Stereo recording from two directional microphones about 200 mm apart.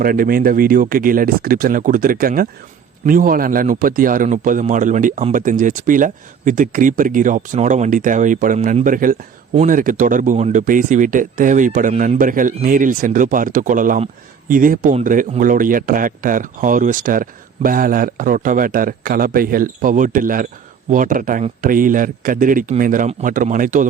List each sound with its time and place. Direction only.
0.0 s a man's voice: 45° right (ahead or behind)